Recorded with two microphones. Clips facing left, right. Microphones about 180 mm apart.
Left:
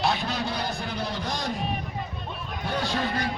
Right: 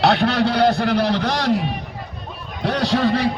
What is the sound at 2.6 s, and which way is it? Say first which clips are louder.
Speech: right 10 dB; 75° right (ahead or behind).